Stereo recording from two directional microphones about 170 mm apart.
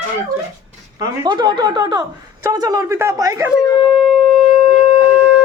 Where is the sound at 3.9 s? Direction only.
Centre (ahead or behind).